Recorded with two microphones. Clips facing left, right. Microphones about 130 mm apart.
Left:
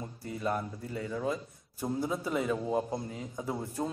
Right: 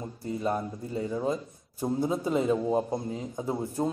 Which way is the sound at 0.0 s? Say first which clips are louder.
Right 4 dB; 25° right (ahead or behind).